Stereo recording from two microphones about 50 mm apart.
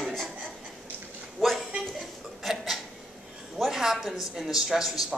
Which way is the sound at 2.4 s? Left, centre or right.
Centre.